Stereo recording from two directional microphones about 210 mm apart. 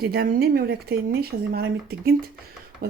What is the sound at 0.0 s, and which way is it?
Speech, 45° right (ahead or behind).